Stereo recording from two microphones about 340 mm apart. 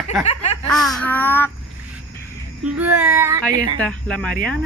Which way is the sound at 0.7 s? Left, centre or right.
Centre.